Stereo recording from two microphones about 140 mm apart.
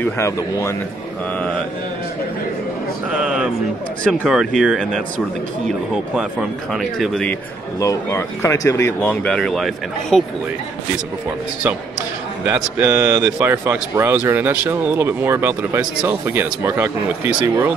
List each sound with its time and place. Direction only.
0.0 s speech: 20° left (ahead or behind)
3.2 s speech: 5° right (ahead or behind)
6.7 s speech: centre (ahead or behind)
7.8 s speech: 20° left (ahead or behind); by 10.2 s centre (ahead or behind)
12.4 s speech: 10° right (ahead or behind)